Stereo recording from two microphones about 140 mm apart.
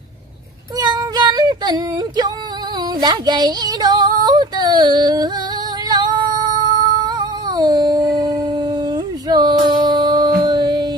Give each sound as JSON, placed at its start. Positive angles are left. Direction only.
{"t": 0.7, "sound": "child singing", "side_deg": -30}
{"t": 3.0, "sound": "female singing", "side_deg": -30}